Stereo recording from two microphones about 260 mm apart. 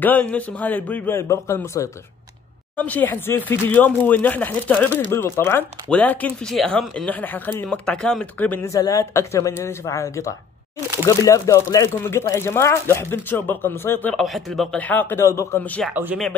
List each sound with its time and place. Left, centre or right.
0.0 s speech: centre
15.9 s speech: centre